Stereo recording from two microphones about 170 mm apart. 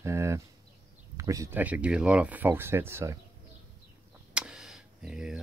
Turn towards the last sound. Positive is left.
turn(degrees=-5)  # may be behind; listen again after turning